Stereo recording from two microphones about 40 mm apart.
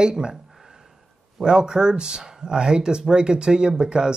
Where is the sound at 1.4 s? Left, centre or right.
Right.